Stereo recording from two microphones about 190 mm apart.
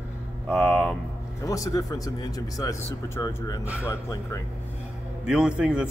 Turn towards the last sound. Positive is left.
turn(degrees=-5)  # may be behind; listen again after turning